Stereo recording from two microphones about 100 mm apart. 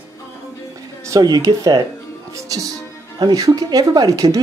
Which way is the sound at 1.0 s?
40° right (ahead or behind).